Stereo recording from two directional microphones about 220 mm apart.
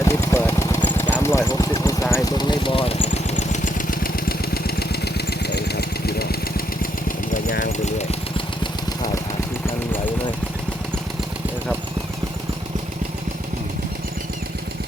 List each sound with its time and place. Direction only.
0.0 s vehicle: 10° left (ahead or behind); by 6.2 s 45° left (ahead or behind)
7.4 s engine: 35° left (ahead or behind)
8.6 s vehicle: 20° left (ahead or behind)